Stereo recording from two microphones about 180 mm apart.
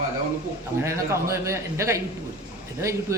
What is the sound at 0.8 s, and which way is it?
A man's voice, 15° right (ahead or behind).